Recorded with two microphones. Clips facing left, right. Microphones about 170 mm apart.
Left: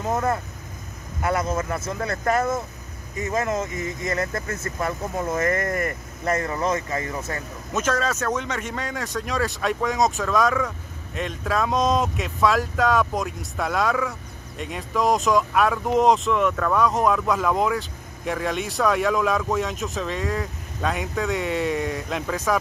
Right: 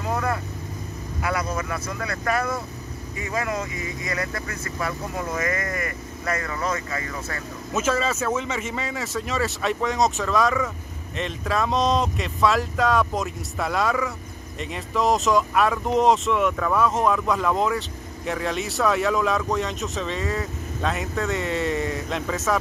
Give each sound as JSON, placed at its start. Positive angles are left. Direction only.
{"t": 0.1, "sound": "speech", "side_deg": 25}
{"t": 3.7, "sound": "speech", "side_deg": 45}
{"t": 4.7, "sound": "speech", "side_deg": 25}
{"t": 5.4, "sound": "speech", "side_deg": 50}
{"t": 6.2, "sound": "speech", "side_deg": 25}
{"t": 7.7, "sound": "speech", "side_deg": -5}